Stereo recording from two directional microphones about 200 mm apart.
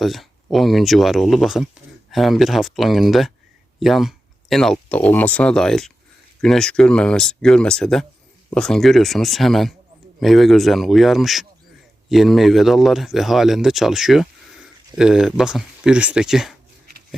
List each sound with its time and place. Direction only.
0.0 s speech: centre (ahead or behind)